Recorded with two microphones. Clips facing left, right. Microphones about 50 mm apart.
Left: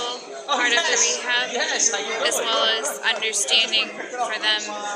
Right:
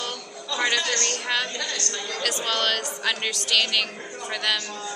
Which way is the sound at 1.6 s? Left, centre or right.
Left.